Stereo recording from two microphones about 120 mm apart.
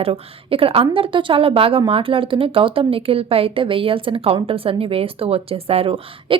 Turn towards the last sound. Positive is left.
turn(degrees=-50)  # may be behind; listen again after turning